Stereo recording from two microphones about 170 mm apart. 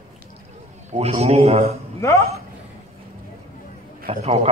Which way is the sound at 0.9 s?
40° right (ahead or behind).